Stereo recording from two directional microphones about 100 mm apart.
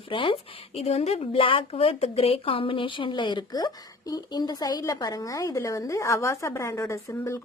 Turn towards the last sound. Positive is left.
turn(degrees=25)  # may be behind; listen again after turning